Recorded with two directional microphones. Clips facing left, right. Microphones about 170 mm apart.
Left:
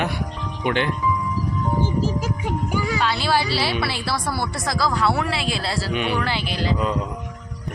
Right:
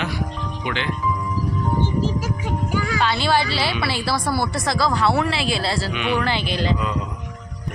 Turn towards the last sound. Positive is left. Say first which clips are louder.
# right 2 dB
turn(degrees=5)  # may be behind; listen again after turning